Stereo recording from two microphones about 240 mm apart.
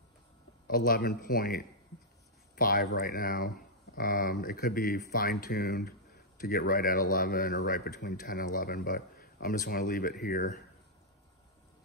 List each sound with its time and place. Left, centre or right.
0.7 s speech: left